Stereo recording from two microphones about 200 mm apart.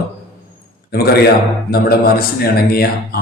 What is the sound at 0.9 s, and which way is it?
A man's voice, 50° left (ahead or behind).